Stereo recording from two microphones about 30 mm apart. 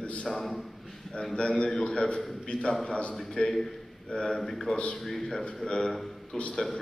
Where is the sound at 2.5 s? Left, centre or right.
Left.